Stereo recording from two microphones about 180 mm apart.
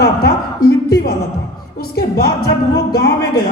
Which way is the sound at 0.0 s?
55° left (ahead or behind).